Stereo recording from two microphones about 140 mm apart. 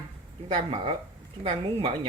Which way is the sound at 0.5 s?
40° right (ahead or behind).